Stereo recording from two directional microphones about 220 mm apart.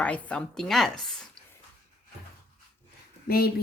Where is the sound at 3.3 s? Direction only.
45° left (ahead or behind).